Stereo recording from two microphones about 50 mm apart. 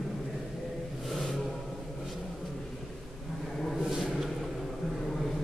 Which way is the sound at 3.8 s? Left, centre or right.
Centre.